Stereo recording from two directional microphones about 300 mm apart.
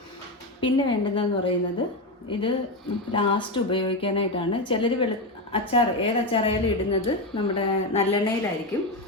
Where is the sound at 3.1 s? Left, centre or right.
Centre.